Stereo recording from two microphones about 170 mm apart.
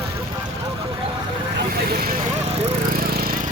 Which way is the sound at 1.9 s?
60° right (ahead or behind).